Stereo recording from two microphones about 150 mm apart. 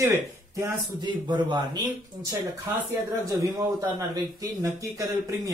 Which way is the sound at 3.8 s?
25° right (ahead or behind).